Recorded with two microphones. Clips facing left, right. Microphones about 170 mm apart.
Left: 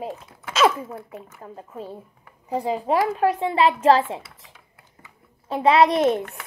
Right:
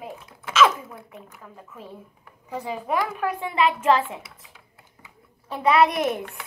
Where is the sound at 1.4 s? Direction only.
30° left (ahead or behind).